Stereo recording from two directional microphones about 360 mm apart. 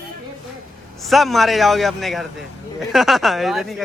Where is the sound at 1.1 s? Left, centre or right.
Centre.